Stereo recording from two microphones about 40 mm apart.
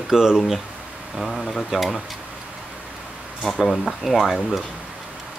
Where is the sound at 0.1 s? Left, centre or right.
Centre.